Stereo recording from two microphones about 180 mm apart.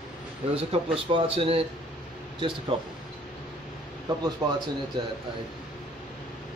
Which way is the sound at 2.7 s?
30° right (ahead or behind).